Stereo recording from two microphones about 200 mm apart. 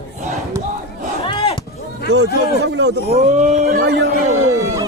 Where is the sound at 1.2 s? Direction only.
25° left (ahead or behind).